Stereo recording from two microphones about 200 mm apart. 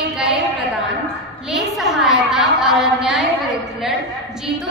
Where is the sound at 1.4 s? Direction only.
Centre (ahead or behind).